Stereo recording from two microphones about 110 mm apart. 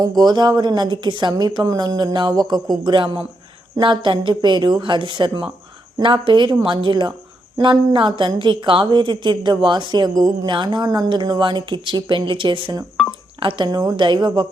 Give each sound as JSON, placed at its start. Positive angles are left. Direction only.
{"t": 0.2, "sound": "speech", "side_deg": -40}